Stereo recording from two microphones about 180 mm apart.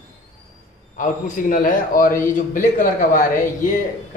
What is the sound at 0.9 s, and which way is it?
A man's voice, 45° left (ahead or behind).